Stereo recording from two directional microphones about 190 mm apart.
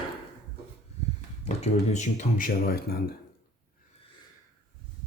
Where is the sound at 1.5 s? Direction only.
35° left (ahead or behind); by 3.2 s 55° left (ahead or behind).